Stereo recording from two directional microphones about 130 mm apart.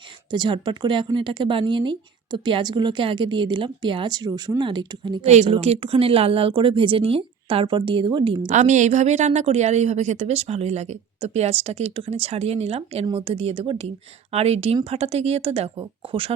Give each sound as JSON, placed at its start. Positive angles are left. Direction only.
{"t": 0.3, "sound": "speech", "side_deg": -35}
{"t": 5.2, "sound": "a woman's voice", "side_deg": -60}
{"t": 8.4, "sound": "a woman's voice", "side_deg": -70}